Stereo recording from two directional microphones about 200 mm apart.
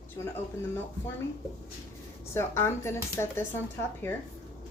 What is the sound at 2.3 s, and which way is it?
A woman's voice, 10° left (ahead or behind).